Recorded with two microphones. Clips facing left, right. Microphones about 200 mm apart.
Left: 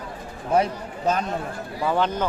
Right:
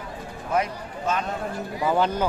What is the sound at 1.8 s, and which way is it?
Speech, 5° right (ahead or behind).